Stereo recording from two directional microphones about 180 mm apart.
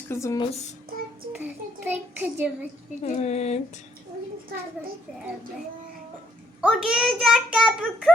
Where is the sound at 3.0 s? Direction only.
40° left (ahead or behind).